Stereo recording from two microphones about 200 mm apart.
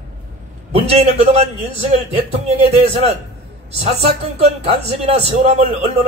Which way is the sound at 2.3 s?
30° right (ahead or behind).